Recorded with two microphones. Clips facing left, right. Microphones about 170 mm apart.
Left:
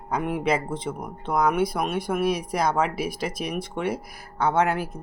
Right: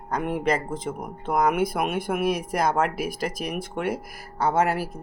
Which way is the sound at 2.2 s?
50° right (ahead or behind).